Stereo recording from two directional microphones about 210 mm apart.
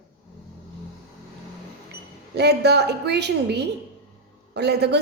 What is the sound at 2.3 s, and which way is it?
A woman's voice, 50° right (ahead or behind).